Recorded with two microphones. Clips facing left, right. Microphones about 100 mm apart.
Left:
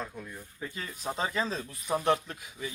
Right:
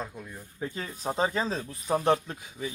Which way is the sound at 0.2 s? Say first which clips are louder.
Even; 5° right (ahead or behind).